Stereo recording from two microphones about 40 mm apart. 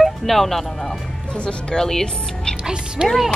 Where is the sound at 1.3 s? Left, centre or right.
Left.